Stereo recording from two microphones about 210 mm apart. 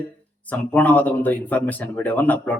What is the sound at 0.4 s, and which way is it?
Speech, 10° left (ahead or behind).